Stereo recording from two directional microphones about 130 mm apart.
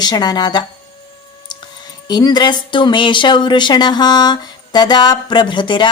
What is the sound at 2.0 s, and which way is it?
Speech, 30° left (ahead or behind).